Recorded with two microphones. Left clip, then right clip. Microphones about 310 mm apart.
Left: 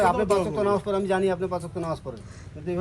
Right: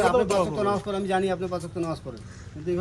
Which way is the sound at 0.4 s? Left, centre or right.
Centre.